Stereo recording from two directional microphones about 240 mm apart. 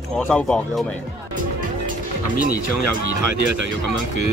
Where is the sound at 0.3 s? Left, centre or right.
Centre.